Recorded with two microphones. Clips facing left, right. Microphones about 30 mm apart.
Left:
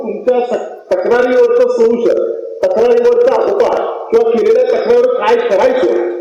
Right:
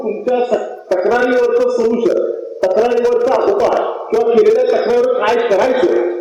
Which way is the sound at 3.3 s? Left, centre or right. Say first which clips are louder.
Left 1 dB; centre.